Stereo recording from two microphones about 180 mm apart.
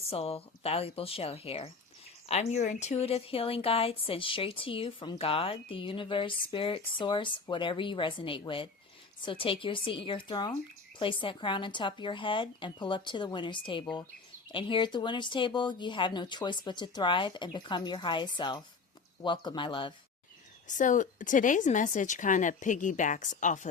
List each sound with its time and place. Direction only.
0.1 s speech: 35° left (ahead or behind)
20.7 s speech: 45° left (ahead or behind)